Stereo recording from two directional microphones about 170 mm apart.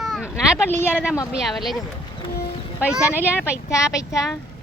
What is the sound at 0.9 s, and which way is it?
Speech, 5° right (ahead or behind).